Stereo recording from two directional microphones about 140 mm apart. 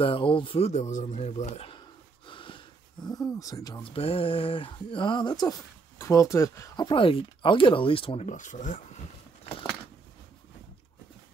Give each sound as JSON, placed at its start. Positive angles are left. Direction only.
{"t": 0.0, "sound": "speech", "side_deg": 40}
{"t": 2.2, "sound": "a sound", "side_deg": 35}
{"t": 3.9, "sound": "speech", "side_deg": 40}
{"t": 6.9, "sound": "speech", "side_deg": 40}
{"t": 8.3, "sound": "speech", "side_deg": 60}